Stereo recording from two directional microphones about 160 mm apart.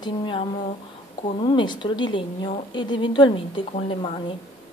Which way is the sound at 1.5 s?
30° left (ahead or behind).